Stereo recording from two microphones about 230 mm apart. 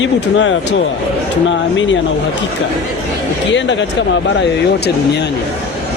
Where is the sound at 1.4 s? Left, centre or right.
Left.